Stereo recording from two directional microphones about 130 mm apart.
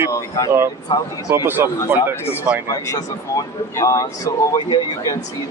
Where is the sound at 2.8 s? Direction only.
25° left (ahead or behind).